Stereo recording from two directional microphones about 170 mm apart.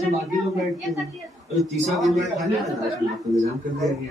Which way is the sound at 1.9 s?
Centre (ahead or behind).